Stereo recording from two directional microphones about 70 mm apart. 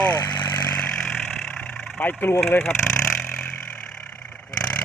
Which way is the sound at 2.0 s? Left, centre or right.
Left.